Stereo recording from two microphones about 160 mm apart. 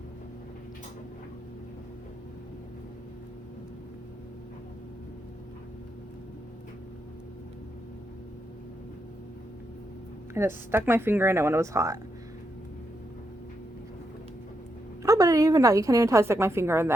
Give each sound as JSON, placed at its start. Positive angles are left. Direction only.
{"t": 10.3, "sound": "speech", "side_deg": -15}
{"t": 15.0, "sound": "a woman's voice", "side_deg": -20}